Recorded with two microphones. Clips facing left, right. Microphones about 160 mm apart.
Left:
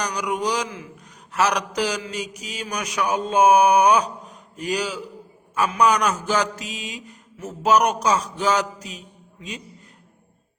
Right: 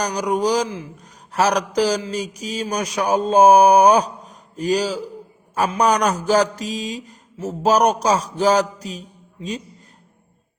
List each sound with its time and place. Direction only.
0.0 s a man's voice: 35° right (ahead or behind)